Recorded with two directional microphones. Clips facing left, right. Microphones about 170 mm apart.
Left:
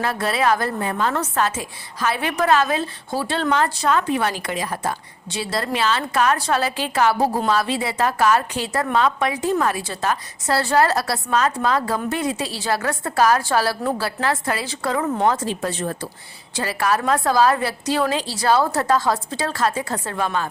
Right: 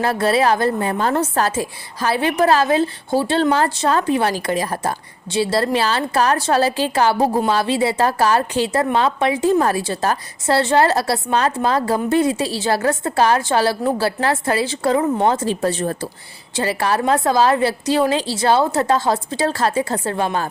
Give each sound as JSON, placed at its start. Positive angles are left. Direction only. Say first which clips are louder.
{"t": 0.0, "sound": "a woman's voice", "louder": "right 4 dB", "side_deg": -30}